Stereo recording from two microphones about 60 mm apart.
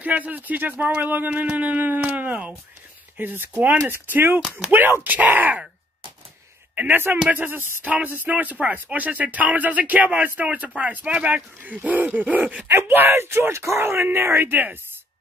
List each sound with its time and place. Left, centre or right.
0.0 s speech: right
4.4 s speech: centre
4.6 s speech: right
6.7 s a sound: right
7.2 s speech: right
12.6 s speech: right
14.5 s speech: right